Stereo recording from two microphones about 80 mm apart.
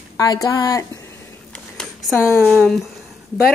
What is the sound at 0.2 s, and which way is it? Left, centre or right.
Speech, left.